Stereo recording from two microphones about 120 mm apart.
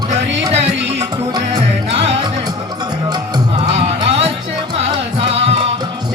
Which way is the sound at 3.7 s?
55° right (ahead or behind).